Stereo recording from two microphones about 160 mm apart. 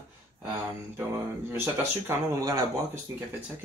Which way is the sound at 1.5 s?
15° right (ahead or behind).